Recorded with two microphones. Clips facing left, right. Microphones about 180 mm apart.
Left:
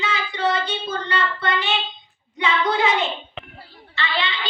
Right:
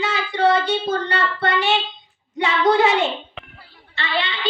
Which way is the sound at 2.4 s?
40° right (ahead or behind).